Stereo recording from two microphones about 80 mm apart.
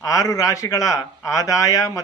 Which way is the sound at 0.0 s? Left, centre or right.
Left.